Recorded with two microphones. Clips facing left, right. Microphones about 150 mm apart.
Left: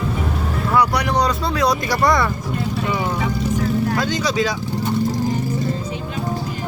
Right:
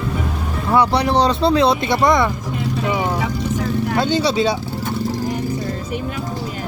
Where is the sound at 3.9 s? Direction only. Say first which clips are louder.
Right 3 dB; 30° right (ahead or behind).